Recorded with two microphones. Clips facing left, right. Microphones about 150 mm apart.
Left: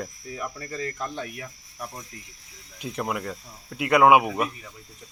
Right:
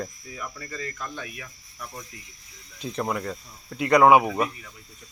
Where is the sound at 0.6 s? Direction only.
40° left (ahead or behind).